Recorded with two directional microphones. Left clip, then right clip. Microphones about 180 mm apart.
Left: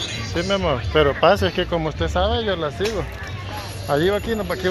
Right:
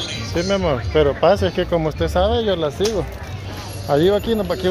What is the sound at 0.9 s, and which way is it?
Speech, 10° right (ahead or behind).